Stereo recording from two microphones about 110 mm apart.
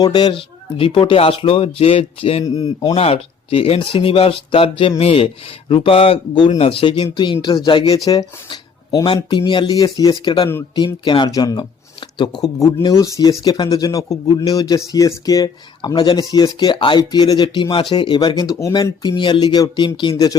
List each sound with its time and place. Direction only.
0.0 s speech: 40° left (ahead or behind); by 2.4 s 65° left (ahead or behind)
2.4 s speech: 35° left (ahead or behind)
2.9 s speech: 65° left (ahead or behind)
6.5 s speech: 60° left (ahead or behind); by 10.2 s 35° left (ahead or behind)
10.2 s speech: 55° left (ahead or behind); by 11.6 s 35° left (ahead or behind)
11.9 s a sound: 50° left (ahead or behind)
12.4 s speech: 30° left (ahead or behind)
19.0 s speech: 45° left (ahead or behind)